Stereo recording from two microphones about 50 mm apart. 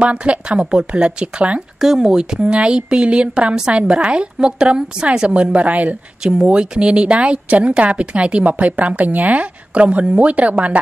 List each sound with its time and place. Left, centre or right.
0.0 s speech: right
1.8 s speech: centre; by 10.8 s right